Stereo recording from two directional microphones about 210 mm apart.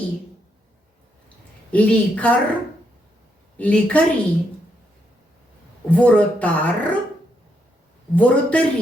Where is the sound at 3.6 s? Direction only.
5° left (ahead or behind).